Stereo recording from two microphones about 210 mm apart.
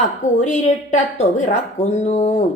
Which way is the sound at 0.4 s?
35° left (ahead or behind).